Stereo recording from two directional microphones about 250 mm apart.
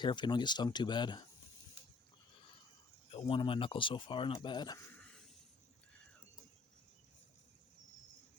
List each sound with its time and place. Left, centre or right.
0.0 s speech: centre
3.1 s speech: left; by 5.2 s centre